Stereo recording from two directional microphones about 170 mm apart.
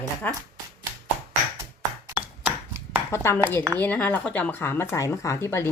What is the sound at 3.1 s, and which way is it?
Speech, 15° left (ahead or behind).